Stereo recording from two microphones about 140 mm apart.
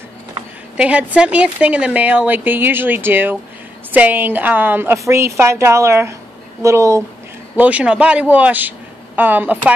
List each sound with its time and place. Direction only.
0.7 s a woman's voice: 10° right (ahead or behind)
7.5 s a man's voice: 10° right (ahead or behind)